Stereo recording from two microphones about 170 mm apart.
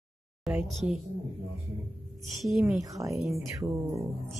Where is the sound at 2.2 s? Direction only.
Centre (ahead or behind).